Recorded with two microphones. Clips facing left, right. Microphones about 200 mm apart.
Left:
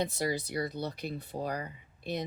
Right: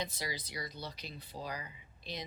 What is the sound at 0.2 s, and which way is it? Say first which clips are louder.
Speech: left 10 dB; 50° left (ahead or behind).